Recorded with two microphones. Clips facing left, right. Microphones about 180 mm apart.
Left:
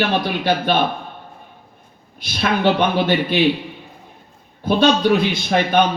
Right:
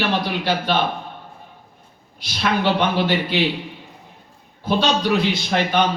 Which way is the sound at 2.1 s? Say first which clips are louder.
Left 1 dB; 55° left (ahead or behind).